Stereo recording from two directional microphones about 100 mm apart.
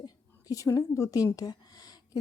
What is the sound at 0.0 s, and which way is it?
A woman's voice, 35° left (ahead or behind).